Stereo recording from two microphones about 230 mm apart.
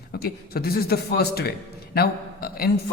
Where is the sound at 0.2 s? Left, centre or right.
Left.